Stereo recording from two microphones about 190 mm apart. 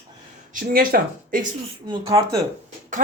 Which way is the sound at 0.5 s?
50° right (ahead or behind).